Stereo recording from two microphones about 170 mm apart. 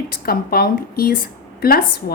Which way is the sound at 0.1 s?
60° left (ahead or behind).